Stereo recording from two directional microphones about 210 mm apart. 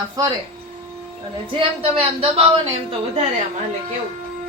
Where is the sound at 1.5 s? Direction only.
25° right (ahead or behind).